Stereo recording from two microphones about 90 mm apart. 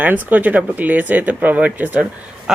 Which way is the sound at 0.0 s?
20° right (ahead or behind).